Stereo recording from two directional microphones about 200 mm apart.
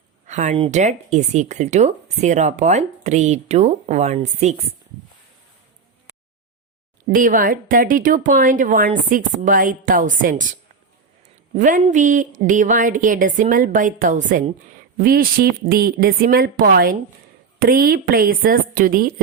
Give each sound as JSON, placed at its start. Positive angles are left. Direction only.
{"t": 0.3, "sound": "speech", "side_deg": -35}
{"t": 7.1, "sound": "speech", "side_deg": -40}